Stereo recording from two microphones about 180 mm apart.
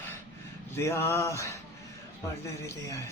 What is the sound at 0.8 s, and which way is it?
Male singing, 15° left (ahead or behind).